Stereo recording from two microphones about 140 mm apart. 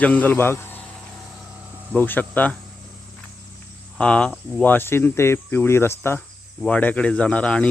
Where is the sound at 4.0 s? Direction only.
10° left (ahead or behind).